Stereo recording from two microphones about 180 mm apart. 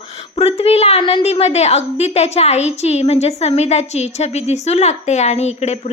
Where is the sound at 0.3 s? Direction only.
35° left (ahead or behind).